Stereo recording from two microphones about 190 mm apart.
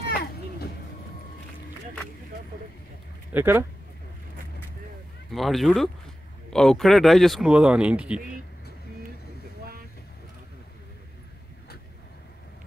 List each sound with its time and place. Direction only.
0.0 s children playing: 55° left (ahead or behind)
3.3 s speech: 10° right (ahead or behind)
5.3 s speech: centre (ahead or behind)